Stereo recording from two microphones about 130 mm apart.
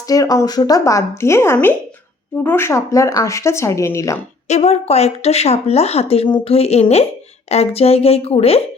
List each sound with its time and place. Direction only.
0.1 s speech: 25° left (ahead or behind)
4.4 s speech: 60° left (ahead or behind)